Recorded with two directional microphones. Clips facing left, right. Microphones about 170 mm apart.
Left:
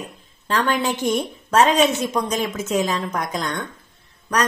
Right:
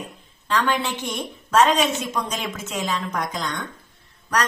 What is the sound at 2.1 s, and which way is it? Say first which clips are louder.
A woman's voice: left 5 dB; 45° left (ahead or behind).